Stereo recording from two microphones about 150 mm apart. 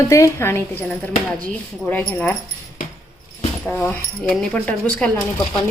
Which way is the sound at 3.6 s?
10° left (ahead or behind).